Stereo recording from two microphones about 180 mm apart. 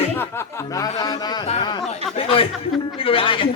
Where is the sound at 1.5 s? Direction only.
30° left (ahead or behind).